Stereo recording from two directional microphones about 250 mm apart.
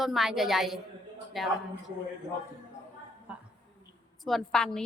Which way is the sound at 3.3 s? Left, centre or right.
Centre.